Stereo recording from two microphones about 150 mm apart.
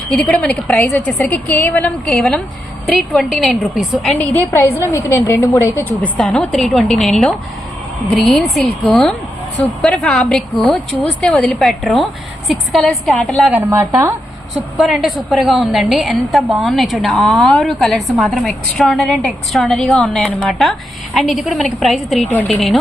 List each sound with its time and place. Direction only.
0.1 s a woman's voice: 5° left (ahead or behind)
4.9 s a woman's voice: 20° left (ahead or behind)
6.1 s a woman's voice: 5° left (ahead or behind)
13.5 s a woman's voice: 15° right (ahead or behind)
14.8 s a woman's voice: centre (ahead or behind)